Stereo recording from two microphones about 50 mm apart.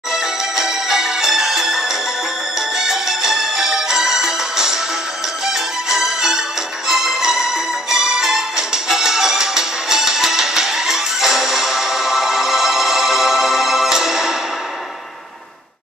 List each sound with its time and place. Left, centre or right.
0.1 s music: centre